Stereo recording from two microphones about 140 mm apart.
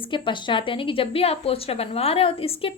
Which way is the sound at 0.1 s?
35° left (ahead or behind).